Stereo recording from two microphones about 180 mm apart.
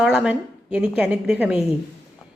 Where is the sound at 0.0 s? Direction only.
5° right (ahead or behind).